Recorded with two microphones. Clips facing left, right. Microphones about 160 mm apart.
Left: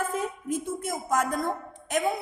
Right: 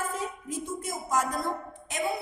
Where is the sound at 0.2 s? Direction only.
50° left (ahead or behind).